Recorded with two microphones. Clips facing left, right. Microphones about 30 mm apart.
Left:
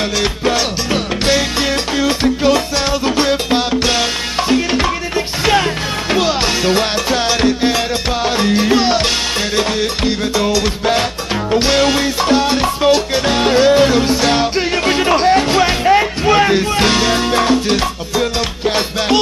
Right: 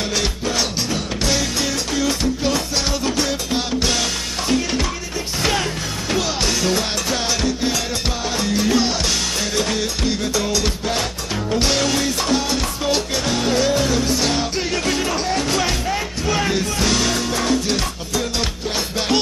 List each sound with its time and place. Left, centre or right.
1.6 s music: left
11.5 s music: left